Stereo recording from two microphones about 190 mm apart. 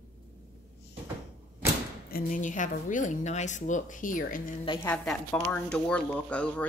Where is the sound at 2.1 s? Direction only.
45° left (ahead or behind).